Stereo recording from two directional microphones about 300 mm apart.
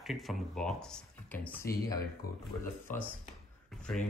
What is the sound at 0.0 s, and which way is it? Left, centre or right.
Speech, centre.